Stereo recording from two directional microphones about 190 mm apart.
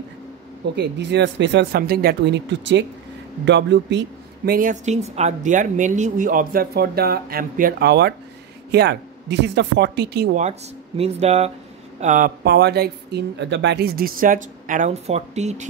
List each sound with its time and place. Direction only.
0.7 s speech: 65° right (ahead or behind)
4.5 s speech: 45° right (ahead or behind)
10.3 s speech: 35° right (ahead or behind)
12.4 s speech: 60° right (ahead or behind); by 15.6 s 35° right (ahead or behind)